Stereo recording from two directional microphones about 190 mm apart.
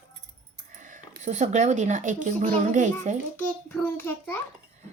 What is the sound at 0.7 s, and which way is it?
Speech, 45° right (ahead or behind).